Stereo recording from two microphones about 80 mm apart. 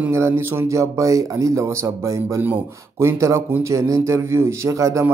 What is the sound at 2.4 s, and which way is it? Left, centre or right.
Speech, right.